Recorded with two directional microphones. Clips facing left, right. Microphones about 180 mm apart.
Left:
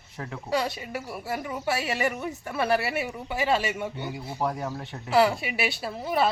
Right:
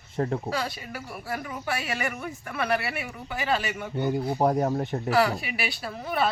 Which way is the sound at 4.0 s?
45° right (ahead or behind).